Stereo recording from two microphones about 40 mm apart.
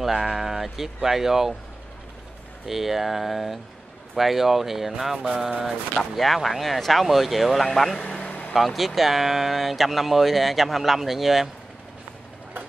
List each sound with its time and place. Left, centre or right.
0.0 s speech: centre
2.6 s speech: centre
5.7 s speech: centre
8.0 s vehicle: left
8.5 s speech: centre